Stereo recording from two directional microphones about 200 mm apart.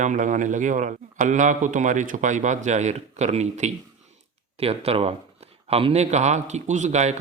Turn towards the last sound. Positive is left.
turn(degrees=-35)  # may be behind; listen again after turning